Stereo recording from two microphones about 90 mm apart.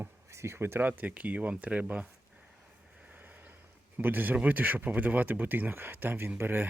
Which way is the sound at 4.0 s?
20° right (ahead or behind).